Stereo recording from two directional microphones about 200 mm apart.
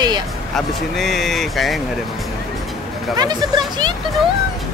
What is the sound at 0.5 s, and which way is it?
Speech, centre (ahead or behind).